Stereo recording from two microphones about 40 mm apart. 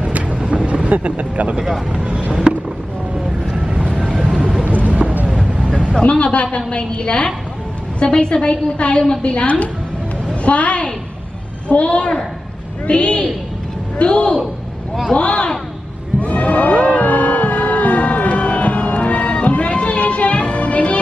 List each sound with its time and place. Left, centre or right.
0.4 s vehicle: right
1.9 s speech: right
2.5 s vehicle: centre
3.5 s vehicle: right
3.9 s vehicle: centre
4.6 s vehicle: right
6.0 s a woman's voice: left
16.2 s music: left